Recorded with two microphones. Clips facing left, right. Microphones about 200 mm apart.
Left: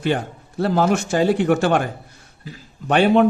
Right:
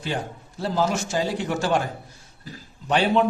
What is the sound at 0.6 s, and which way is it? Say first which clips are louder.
Speech: left 6 dB; 60° left (ahead or behind).